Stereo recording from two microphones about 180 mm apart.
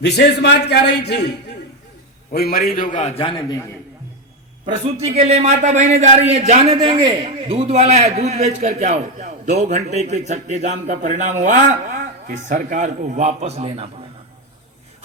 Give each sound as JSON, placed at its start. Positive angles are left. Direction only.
{"t": 0.0, "sound": "a man's voice", "side_deg": 70}
{"t": 2.3, "sound": "a man's voice", "side_deg": 55}
{"t": 3.2, "sound": "a man's voice", "side_deg": 25}
{"t": 4.6, "sound": "a man's voice", "side_deg": -35}